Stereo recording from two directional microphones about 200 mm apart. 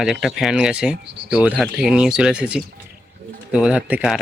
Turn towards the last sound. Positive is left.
turn(degrees=-5)  # may be behind; listen again after turning